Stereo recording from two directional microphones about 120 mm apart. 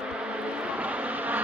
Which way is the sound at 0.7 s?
10° right (ahead or behind).